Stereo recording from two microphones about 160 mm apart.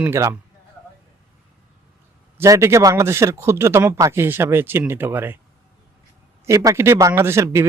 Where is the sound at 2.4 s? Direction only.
15° right (ahead or behind).